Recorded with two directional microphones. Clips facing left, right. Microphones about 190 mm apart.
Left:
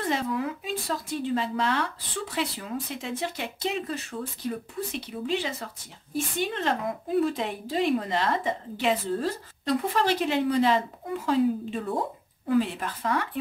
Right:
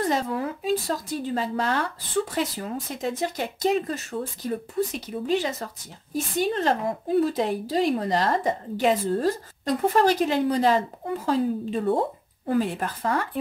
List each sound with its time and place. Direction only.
0.1 s speech: 40° right (ahead or behind)